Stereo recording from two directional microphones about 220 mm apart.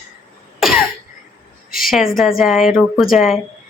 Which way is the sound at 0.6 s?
Centre (ahead or behind).